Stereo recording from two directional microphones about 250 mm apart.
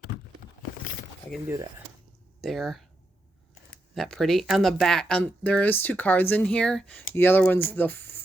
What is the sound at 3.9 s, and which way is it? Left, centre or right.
Speech, centre.